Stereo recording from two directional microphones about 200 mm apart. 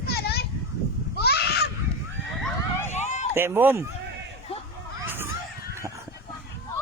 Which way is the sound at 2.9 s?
35° left (ahead or behind).